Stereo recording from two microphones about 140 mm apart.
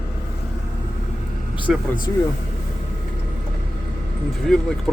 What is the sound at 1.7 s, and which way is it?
Speech, 5° right (ahead or behind).